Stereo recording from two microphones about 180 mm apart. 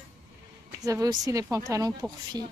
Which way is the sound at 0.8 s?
20° right (ahead or behind).